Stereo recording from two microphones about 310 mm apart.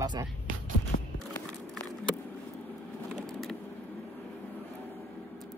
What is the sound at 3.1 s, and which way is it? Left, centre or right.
Vehicle, centre.